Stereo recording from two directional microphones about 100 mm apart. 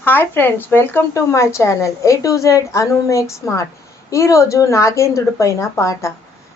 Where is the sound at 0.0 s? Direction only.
20° left (ahead or behind).